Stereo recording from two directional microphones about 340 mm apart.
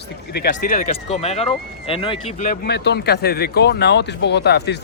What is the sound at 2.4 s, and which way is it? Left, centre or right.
Speech, left.